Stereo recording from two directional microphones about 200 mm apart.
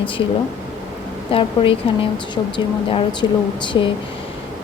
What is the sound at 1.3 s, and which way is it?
Speech, 25° left (ahead or behind).